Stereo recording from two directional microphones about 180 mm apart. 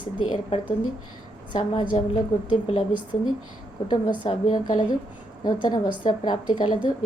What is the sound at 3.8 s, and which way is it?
Speech, 25° left (ahead or behind).